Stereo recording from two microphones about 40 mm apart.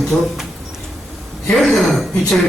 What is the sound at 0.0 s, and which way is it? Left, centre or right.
Speech, centre.